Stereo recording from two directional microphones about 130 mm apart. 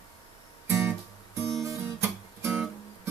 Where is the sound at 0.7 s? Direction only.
15° right (ahead or behind).